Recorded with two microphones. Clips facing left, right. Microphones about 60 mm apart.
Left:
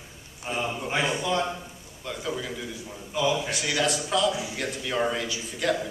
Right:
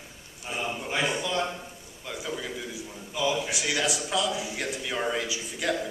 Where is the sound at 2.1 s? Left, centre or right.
Centre.